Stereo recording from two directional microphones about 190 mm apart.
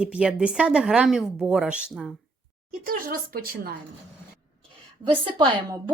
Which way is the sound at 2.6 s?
50° right (ahead or behind).